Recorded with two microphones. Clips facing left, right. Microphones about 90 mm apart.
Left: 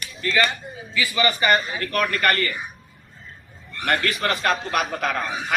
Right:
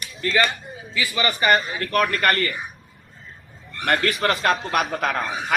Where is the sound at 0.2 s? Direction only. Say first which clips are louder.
Right 1 dB; 30° right (ahead or behind).